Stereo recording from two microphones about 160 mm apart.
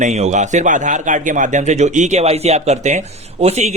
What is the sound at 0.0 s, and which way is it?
Speech, 45° right (ahead or behind).